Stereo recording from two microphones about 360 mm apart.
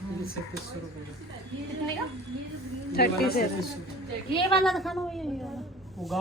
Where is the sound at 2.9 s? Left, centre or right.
Left.